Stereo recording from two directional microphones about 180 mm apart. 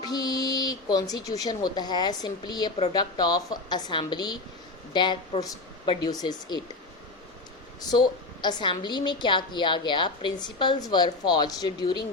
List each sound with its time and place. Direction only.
0.0 s a woman's voice: 20° left (ahead or behind)
7.8 s a woman's voice: 20° left (ahead or behind)